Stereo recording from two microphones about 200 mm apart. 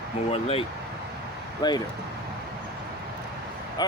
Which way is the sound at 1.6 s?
20° left (ahead or behind).